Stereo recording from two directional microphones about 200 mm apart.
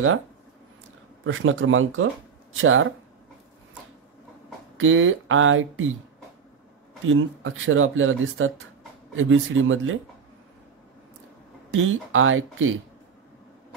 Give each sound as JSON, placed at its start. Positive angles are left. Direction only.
{"t": 1.2, "sound": "speech", "side_deg": -80}
{"t": 4.7, "sound": "speech", "side_deg": -80}
{"t": 7.1, "sound": "speech", "side_deg": -80}
{"t": 11.7, "sound": "speech", "side_deg": -80}